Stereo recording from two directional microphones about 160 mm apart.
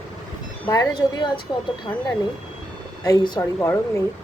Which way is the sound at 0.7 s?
25° left (ahead or behind).